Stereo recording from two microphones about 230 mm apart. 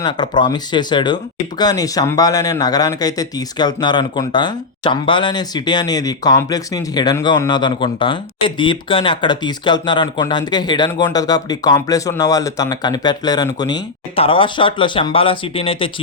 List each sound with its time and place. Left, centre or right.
0.0 s speech: centre